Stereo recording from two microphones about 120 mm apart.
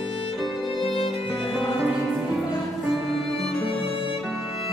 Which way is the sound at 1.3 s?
Centre (ahead or behind).